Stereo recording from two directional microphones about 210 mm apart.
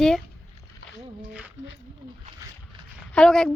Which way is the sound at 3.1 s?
Centre (ahead or behind).